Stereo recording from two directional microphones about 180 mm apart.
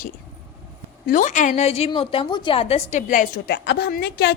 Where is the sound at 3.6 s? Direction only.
65° left (ahead or behind).